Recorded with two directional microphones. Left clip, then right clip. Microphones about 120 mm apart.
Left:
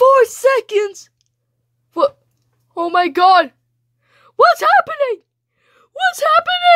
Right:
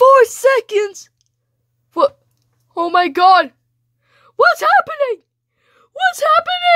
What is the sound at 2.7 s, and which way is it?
Speech, 15° right (ahead or behind).